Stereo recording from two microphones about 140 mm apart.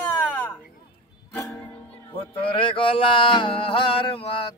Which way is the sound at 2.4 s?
40° left (ahead or behind).